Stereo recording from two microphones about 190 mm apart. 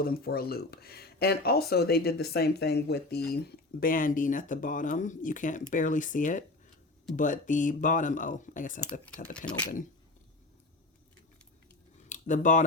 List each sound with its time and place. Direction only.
0.0 s speech: 55° left (ahead or behind)
12.0 s speech: 40° left (ahead or behind)